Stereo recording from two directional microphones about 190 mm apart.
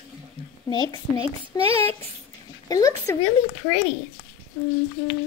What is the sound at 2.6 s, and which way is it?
Speech, 15° left (ahead or behind).